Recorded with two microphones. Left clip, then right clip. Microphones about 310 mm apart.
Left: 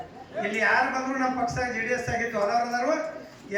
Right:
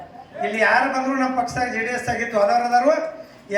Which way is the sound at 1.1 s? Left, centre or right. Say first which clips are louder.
Right 5 dB; right.